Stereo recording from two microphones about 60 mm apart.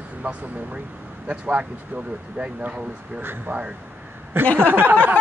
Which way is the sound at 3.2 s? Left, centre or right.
Right.